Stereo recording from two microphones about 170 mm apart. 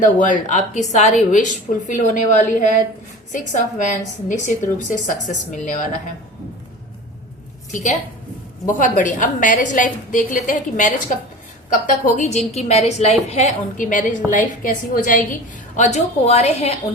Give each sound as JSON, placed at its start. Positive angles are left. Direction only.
{"t": 0.2, "sound": "a woman's voice", "side_deg": 45}
{"t": 7.7, "sound": "a woman's voice", "side_deg": 45}